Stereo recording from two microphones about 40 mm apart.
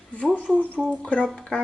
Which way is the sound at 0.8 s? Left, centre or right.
Centre.